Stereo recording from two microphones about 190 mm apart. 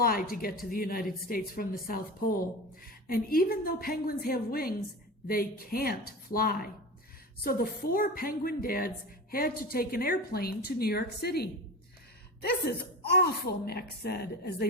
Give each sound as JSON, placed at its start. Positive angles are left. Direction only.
{"t": 0.0, "sound": "a woman's voice", "side_deg": 50}
{"t": 13.1, "sound": "a child's voice", "side_deg": 55}